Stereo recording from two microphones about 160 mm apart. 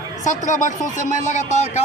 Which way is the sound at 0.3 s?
50° left (ahead or behind).